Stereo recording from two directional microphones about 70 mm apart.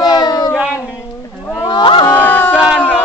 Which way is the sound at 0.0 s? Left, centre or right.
Left.